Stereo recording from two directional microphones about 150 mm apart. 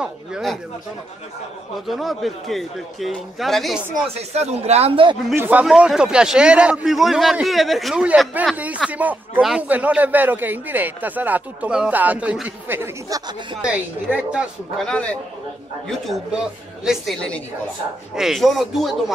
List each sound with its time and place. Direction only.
0.0 s speech: 5° right (ahead or behind)
1.9 s a man's voice: centre (ahead or behind)
4.3 s speech: 45° right (ahead or behind)
5.3 s a man's voice: 15° right (ahead or behind)
14.9 s a man's voice: 10° left (ahead or behind)
15.9 s a man's voice: centre (ahead or behind)